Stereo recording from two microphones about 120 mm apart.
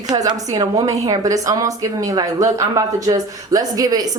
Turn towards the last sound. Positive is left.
turn(degrees=-30)  # may be behind; listen again after turning